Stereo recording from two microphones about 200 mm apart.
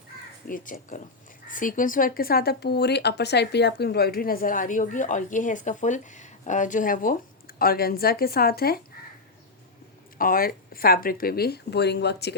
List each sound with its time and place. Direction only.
0.4 s speech: 45° left (ahead or behind)
10.2 s speech: 45° left (ahead or behind)